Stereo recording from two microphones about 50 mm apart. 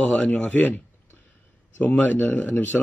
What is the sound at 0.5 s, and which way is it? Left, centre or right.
Speech, left.